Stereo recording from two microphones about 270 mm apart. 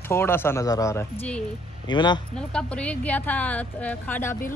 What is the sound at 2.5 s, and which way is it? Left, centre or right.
Speech, centre.